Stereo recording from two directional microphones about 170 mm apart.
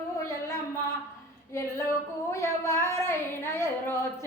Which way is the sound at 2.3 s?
15° left (ahead or behind).